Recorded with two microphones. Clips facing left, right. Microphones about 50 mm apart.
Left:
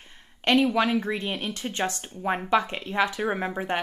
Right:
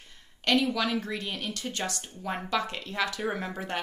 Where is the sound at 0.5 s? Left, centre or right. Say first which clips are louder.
Left 5 dB; left.